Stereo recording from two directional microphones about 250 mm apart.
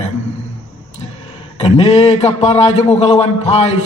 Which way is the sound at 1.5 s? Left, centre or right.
Left.